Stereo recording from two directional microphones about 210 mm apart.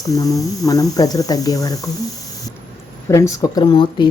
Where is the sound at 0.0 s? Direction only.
15° left (ahead or behind).